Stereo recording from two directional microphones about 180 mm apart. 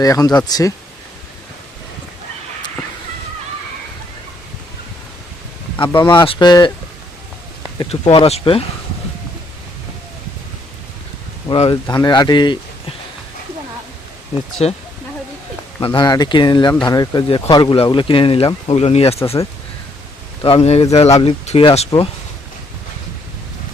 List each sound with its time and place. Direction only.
0.0 s speech: 20° left (ahead or behind)
6.1 s speech: 25° left (ahead or behind)
8.1 s speech: 30° left (ahead or behind)
11.4 s speech: 30° left (ahead or behind)
14.6 s speech: 35° left (ahead or behind)
15.8 s speech: 25° left (ahead or behind)
20.4 s speech: 30° left (ahead or behind)